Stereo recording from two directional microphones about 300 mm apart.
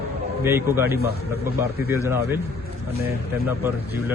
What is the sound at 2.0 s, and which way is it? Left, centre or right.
Speech, centre.